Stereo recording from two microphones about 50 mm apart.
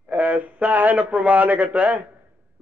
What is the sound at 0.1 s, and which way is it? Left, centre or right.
A man's voice, right.